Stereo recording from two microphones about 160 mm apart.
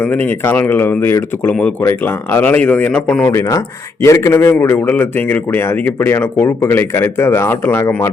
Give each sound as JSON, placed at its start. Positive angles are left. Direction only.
{"t": 0.0, "sound": "a man's voice", "side_deg": 10}
{"t": 3.3, "sound": "a man's voice", "side_deg": 20}